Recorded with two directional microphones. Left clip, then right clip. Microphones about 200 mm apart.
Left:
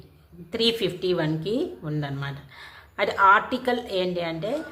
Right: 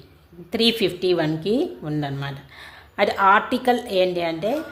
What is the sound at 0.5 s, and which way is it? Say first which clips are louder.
Speech: right 3 dB; 25° right (ahead or behind).